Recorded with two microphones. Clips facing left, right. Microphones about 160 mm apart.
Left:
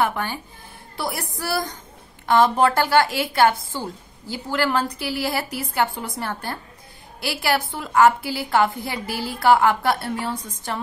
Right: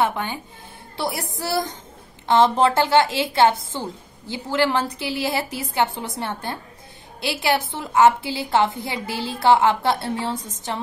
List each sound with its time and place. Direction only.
0.0 s a woman's voice: 20° right (ahead or behind)